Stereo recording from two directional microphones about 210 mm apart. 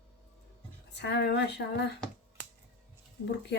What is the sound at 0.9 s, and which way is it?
Speech, 55° left (ahead or behind).